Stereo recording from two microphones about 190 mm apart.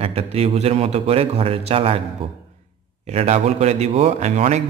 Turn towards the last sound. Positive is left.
turn(degrees=-40)  # may be behind; listen again after turning